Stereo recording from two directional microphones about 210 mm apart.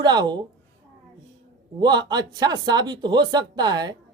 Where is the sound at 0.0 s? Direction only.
20° right (ahead or behind).